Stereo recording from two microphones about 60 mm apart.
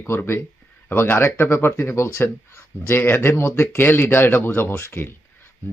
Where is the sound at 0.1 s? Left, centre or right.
Left.